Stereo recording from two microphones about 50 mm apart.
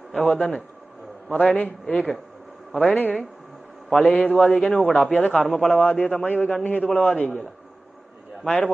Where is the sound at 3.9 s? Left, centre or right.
Left.